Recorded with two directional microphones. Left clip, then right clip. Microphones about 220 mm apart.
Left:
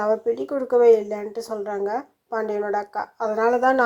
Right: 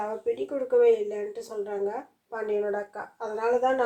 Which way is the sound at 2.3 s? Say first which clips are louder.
Left 4 dB; 30° left (ahead or behind).